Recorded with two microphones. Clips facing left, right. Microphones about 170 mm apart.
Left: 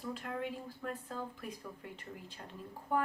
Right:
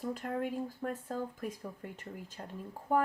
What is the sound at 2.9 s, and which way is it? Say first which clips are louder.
Speech: right 4 dB; 45° right (ahead or behind).